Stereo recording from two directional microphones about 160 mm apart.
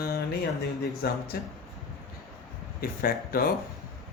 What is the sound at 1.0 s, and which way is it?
Speech, 75° left (ahead or behind).